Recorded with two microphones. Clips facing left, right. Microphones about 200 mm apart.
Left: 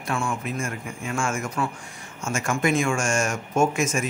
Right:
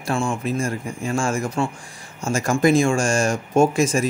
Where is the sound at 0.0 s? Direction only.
30° right (ahead or behind).